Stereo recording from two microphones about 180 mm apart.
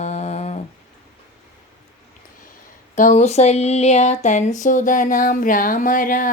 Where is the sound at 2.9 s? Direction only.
45° left (ahead or behind).